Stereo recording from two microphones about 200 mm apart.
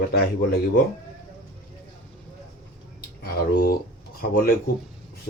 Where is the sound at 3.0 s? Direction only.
50° left (ahead or behind).